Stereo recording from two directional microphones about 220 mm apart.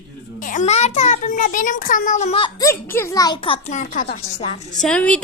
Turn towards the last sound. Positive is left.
turn(degrees=5)  # may be behind; listen again after turning